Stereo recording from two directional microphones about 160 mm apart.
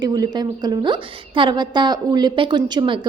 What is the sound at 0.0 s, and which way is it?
A woman's voice, 25° right (ahead or behind).